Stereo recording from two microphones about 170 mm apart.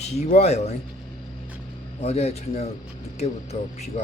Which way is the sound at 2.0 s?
40° left (ahead or behind).